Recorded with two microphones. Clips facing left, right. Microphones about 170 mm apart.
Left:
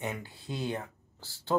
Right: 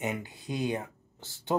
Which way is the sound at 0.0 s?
20° right (ahead or behind).